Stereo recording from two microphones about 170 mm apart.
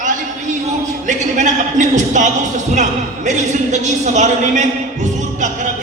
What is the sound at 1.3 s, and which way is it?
Speech, 45° right (ahead or behind).